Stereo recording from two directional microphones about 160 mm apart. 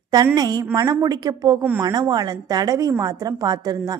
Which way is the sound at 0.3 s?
25° right (ahead or behind).